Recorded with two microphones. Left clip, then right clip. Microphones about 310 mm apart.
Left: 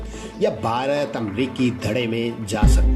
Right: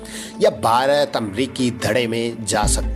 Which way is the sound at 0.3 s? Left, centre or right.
Right.